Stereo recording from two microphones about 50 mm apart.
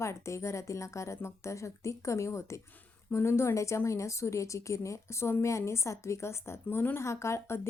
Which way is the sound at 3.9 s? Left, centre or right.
Left.